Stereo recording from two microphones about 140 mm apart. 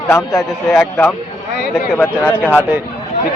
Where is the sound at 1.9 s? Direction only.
10° left (ahead or behind).